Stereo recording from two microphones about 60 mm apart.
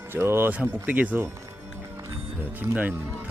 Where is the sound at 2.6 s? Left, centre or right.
Right.